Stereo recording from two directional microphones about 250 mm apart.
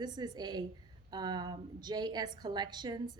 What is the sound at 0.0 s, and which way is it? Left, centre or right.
A woman's voice, centre.